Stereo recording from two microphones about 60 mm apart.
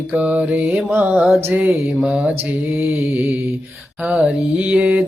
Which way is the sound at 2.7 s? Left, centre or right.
Right.